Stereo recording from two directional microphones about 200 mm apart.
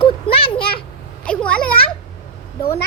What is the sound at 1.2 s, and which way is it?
Speech, 5° left (ahead or behind).